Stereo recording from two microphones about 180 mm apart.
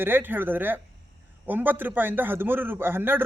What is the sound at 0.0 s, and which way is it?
A man's voice, 10° right (ahead or behind).